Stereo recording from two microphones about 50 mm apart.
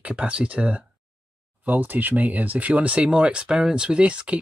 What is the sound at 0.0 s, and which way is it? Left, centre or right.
Speech, right.